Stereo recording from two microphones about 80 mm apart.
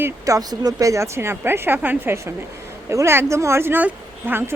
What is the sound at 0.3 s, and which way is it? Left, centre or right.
A woman's voice, right.